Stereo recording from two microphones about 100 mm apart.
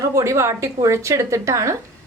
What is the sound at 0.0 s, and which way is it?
A woman's voice, 30° right (ahead or behind).